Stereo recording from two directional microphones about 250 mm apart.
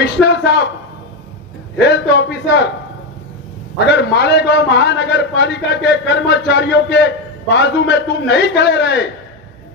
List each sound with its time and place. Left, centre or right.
0.0 s a man's voice: left
1.9 s a man's voice: left
3.7 s a man's voice: left